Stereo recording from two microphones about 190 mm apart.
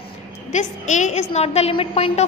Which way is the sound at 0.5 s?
40° left (ahead or behind).